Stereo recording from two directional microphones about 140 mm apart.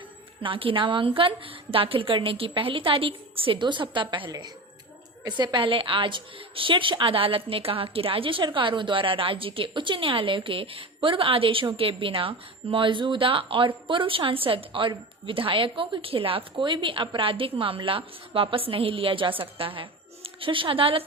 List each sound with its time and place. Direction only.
0.4 s a woman's voice: 40° right (ahead or behind)